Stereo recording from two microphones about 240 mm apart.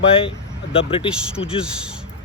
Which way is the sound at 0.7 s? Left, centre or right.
Left.